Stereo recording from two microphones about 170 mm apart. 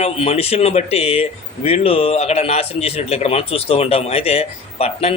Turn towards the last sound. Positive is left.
turn(degrees=35)  # may be behind; listen again after turning